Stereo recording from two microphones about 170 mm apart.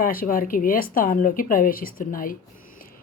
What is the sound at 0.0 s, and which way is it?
Speech, 55° left (ahead or behind).